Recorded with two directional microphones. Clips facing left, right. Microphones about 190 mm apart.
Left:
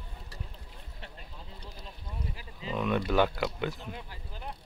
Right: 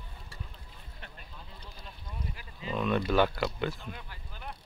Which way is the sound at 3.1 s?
15° left (ahead or behind).